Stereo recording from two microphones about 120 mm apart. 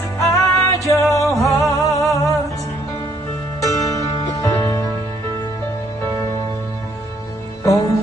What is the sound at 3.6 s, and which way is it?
Music, 30° left (ahead or behind).